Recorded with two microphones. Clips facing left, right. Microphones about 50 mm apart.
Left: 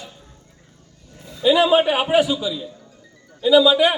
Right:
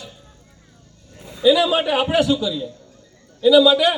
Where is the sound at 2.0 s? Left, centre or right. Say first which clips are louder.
Even; centre.